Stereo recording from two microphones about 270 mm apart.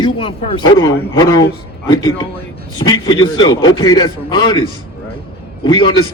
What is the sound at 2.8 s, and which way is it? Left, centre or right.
A man's voice, centre.